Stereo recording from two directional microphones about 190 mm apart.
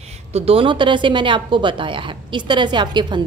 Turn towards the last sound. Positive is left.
turn(degrees=-25)  # may be behind; listen again after turning